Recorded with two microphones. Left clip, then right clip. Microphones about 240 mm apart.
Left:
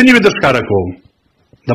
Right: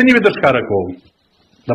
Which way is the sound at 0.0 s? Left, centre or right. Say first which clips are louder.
Left 2 dB; left.